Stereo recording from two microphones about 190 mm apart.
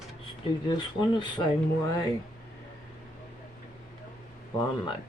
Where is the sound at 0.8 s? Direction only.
25° left (ahead or behind).